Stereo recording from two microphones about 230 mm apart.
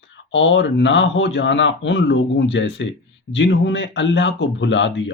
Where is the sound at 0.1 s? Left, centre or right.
Left.